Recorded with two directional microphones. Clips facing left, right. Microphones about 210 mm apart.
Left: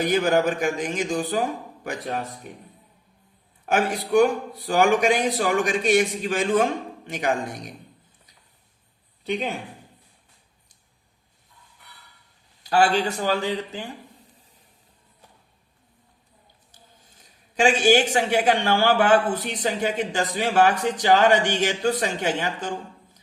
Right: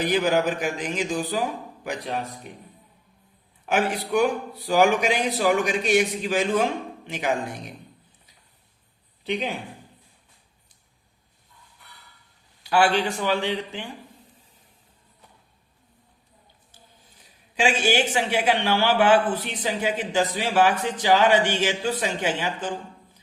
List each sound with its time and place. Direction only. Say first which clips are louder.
0.0 s speech: left 1 dB; 45° left (ahead or behind)
3.7 s speech: left 2 dB; 45° left (ahead or behind)
9.2 s speech: left 1 dB; 45° left (ahead or behind)
12.6 s speech: left 1 dB; 40° left (ahead or behind)
17.2 s speech: left 3 dB; 45° left (ahead or behind)